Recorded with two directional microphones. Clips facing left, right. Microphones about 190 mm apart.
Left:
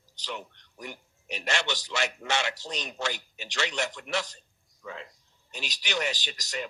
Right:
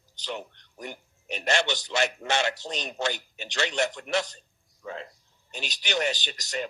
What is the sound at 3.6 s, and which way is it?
Speech, 40° right (ahead or behind).